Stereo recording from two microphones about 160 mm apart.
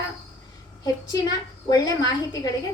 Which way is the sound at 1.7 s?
25° left (ahead or behind).